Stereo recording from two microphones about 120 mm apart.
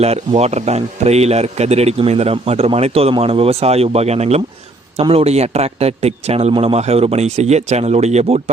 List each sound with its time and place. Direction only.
0.3 s speech: 65° right (ahead or behind)
6.5 s speech: 50° right (ahead or behind); by 8.4 s 65° right (ahead or behind)